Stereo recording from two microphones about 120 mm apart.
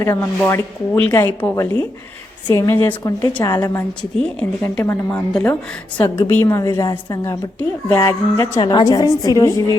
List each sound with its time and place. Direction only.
0.0 s speech: 25° left (ahead or behind)
5.3 s speech: 10° left (ahead or behind)
6.1 s speech: 20° left (ahead or behind)
8.6 s speech: 35° left (ahead or behind)